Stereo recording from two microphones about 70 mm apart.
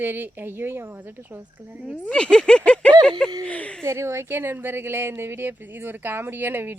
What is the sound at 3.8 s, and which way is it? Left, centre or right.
Speech, right.